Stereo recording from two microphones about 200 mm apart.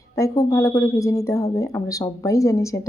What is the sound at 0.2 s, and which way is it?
A woman's voice, 15° left (ahead or behind).